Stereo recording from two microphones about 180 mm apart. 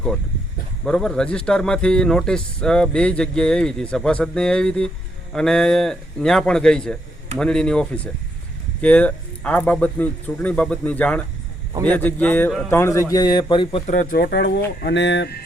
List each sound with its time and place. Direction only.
0.9 s speech: 5° left (ahead or behind); by 13.9 s 30° left (ahead or behind)
13.9 s speech: 50° left (ahead or behind); by 14.6 s 65° left (ahead or behind)
14.8 s speech: 80° left